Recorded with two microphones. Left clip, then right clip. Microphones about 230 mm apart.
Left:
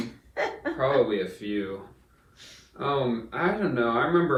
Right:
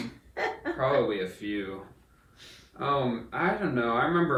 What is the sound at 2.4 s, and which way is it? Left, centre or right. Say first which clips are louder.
Speech: left 2 dB; left.